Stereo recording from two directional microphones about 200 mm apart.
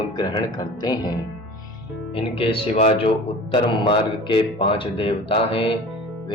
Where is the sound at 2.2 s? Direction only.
25° left (ahead or behind).